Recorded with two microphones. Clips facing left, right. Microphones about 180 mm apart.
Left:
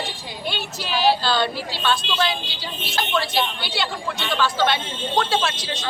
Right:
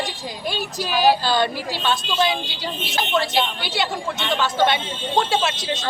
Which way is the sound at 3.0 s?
20° right (ahead or behind).